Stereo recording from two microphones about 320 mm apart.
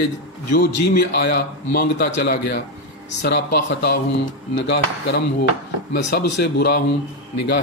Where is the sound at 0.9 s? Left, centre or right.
Left.